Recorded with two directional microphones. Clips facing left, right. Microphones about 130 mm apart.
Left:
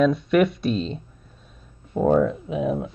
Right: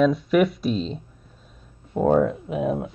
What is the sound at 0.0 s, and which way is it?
Speech, centre (ahead or behind).